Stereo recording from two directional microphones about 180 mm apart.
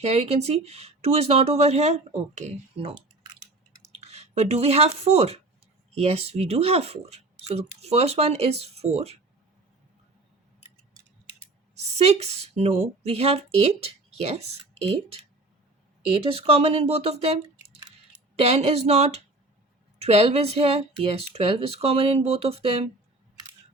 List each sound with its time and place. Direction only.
0.0 s speech: 35° right (ahead or behind)
11.7 s speech: 35° right (ahead or behind)
18.3 s speech: 35° right (ahead or behind)